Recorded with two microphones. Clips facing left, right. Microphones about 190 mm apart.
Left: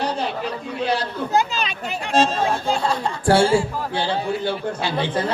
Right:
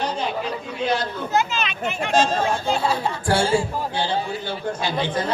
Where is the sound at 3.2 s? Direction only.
30° left (ahead or behind).